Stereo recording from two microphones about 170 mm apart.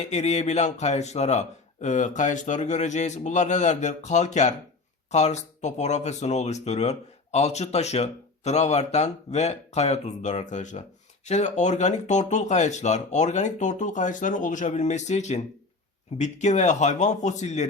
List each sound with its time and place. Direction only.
0.0 s a man's voice: 40° left (ahead or behind)